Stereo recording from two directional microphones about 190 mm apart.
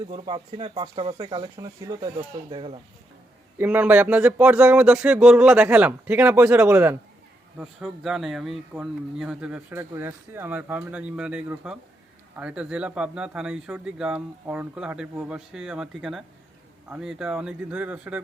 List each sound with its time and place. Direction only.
0.1 s speech: 25° right (ahead or behind)
3.6 s speech: 10° right (ahead or behind)